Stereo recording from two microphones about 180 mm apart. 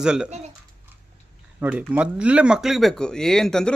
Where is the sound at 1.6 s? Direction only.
5° right (ahead or behind).